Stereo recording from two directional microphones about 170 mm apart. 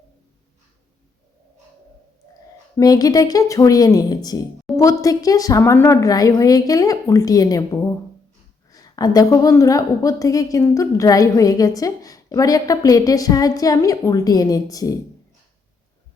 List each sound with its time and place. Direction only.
2.7 s a woman's voice: 20° left (ahead or behind)